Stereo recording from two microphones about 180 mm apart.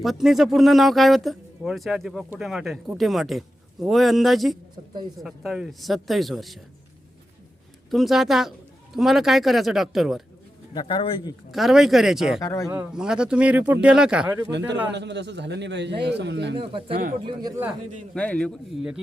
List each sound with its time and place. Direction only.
0.0 s speech: centre (ahead or behind)
7.9 s speech: centre (ahead or behind)
10.8 s speech: 25° left (ahead or behind)
11.5 s speech: centre (ahead or behind)
12.4 s speech: 20° left (ahead or behind)
12.6 s speech: 10° right (ahead or behind)
14.9 s a man's voice: 75° right (ahead or behind)
17.2 s speech: 25° right (ahead or behind)
18.1 s speech: 5° left (ahead or behind)